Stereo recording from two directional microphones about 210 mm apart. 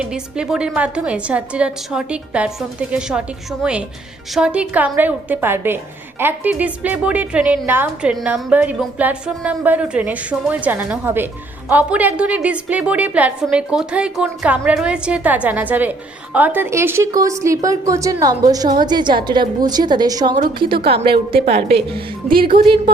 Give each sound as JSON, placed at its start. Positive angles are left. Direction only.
{"t": 0.0, "sound": "a woman's voice", "side_deg": -5}